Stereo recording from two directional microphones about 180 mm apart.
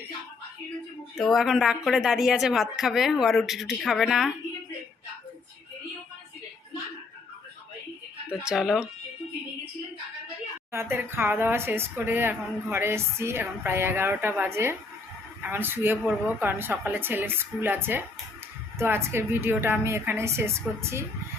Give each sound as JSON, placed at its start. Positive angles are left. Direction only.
{"t": 1.2, "sound": "a woman's voice", "side_deg": 0}
{"t": 8.3, "sound": "a woman's voice", "side_deg": -5}
{"t": 10.7, "sound": "speech", "side_deg": -15}